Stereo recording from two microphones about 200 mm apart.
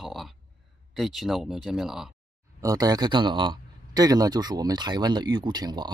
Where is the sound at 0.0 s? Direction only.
Centre (ahead or behind).